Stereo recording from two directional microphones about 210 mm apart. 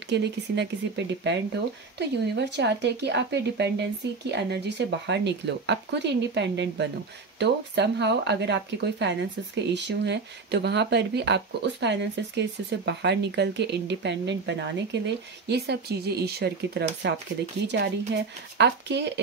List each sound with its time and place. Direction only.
0.1 s speech: 55° right (ahead or behind)